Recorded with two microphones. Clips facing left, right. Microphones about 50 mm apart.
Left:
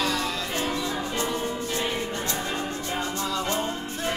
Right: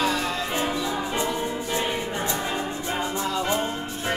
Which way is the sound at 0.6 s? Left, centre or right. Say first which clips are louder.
Right 2 dB; centre.